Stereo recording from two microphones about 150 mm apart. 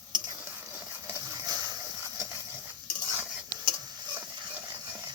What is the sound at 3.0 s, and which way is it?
Stir, 15° right (ahead or behind).